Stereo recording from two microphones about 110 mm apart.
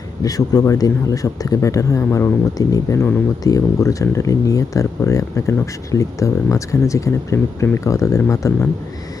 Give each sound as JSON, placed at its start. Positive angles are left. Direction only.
{"t": 0.2, "sound": "speech", "side_deg": 35}
{"t": 2.6, "sound": "speech", "side_deg": 30}